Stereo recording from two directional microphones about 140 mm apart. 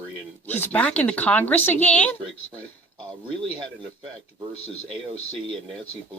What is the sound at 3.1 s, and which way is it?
Speech, 35° right (ahead or behind).